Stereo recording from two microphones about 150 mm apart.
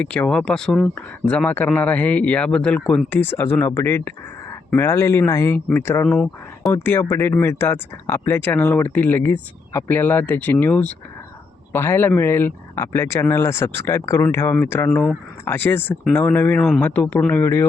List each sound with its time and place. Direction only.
0.0 s speech: 5° left (ahead or behind)
6.1 s speech: centre (ahead or behind)
6.8 s speech: 15° left (ahead or behind)
14.8 s speech: 5° left (ahead or behind)